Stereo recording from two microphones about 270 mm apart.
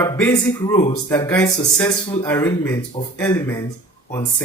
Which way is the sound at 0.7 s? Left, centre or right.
Left.